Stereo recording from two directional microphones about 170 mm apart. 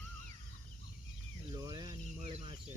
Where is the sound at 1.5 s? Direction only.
20° right (ahead or behind).